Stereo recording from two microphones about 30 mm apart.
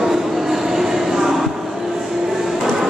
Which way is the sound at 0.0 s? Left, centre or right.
Centre.